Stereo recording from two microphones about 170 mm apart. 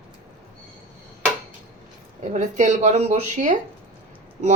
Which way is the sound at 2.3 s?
45° right (ahead or behind).